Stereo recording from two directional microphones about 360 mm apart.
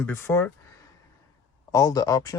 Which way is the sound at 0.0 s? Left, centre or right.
Centre.